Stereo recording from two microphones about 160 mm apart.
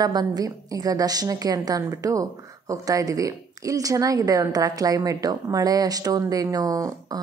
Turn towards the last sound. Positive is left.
turn(degrees=-20)  # may be behind; listen again after turning